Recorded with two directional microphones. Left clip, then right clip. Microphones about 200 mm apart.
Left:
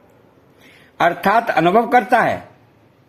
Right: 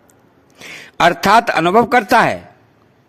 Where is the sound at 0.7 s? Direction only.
35° right (ahead or behind).